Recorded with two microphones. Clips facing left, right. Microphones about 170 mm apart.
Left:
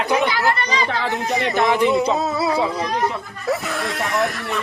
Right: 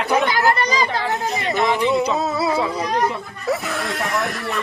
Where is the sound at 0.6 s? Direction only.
35° right (ahead or behind).